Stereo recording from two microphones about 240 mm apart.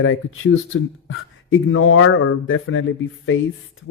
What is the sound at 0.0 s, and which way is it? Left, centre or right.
Speech, left.